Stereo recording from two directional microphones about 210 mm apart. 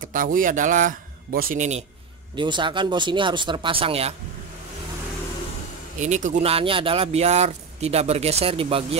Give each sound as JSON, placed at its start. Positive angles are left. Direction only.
{"t": 0.0, "sound": "a man's voice", "side_deg": -40}
{"t": 2.3, "sound": "speech", "side_deg": -20}
{"t": 5.9, "sound": "speech", "side_deg": -35}